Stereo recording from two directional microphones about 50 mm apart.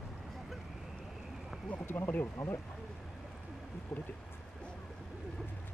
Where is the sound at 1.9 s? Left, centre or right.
Left.